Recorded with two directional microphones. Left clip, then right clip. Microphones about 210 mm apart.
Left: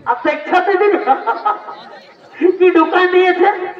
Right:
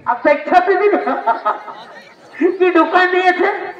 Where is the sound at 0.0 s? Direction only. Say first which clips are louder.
Right 2 dB; 45° left (ahead or behind).